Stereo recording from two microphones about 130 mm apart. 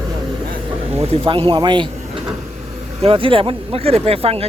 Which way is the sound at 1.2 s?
40° right (ahead or behind).